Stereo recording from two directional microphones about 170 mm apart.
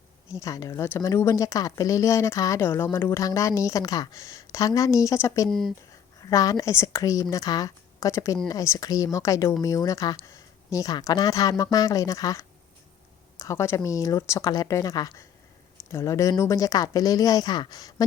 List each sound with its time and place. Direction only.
0.3 s speech: 20° left (ahead or behind)
5.5 s speech: centre (ahead or behind)
6.1 s speech: 20° left (ahead or behind)